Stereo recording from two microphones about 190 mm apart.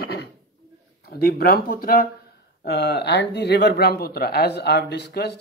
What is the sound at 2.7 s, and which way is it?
Speech, 60° left (ahead or behind).